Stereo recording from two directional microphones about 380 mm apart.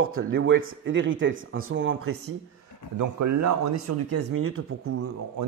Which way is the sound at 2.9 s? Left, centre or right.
Right.